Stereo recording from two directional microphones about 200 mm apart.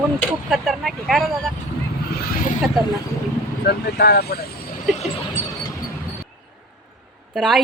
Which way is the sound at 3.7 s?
55° left (ahead or behind).